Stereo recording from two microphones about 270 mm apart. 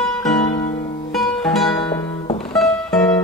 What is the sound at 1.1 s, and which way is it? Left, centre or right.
Music, centre.